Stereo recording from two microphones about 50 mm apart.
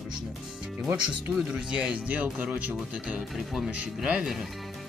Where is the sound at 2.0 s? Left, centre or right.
Right.